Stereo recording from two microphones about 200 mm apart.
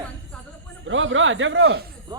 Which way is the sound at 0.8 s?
70° right (ahead or behind).